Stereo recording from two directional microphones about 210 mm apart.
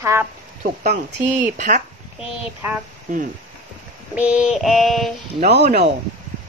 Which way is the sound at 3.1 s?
35° right (ahead or behind).